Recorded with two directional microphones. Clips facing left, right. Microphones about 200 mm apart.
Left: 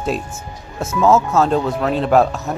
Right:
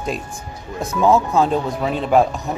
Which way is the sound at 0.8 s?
15° right (ahead or behind).